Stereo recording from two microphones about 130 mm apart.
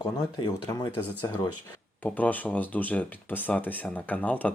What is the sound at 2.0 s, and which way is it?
Speech, 10° left (ahead or behind).